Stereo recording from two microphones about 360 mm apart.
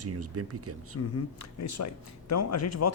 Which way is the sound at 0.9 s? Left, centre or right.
Left.